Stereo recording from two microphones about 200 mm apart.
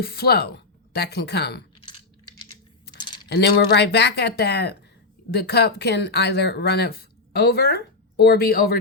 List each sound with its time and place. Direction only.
0.0 s speech: 50° left (ahead or behind)
3.2 s speech: 55° left (ahead or behind)